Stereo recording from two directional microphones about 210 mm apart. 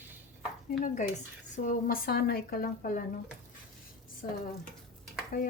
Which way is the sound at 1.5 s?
40° left (ahead or behind).